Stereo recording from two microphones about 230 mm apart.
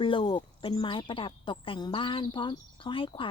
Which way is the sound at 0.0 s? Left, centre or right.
Left.